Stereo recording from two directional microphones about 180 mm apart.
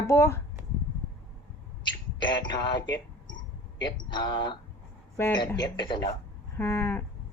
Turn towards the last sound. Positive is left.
turn(degrees=15)  # may be behind; listen again after turning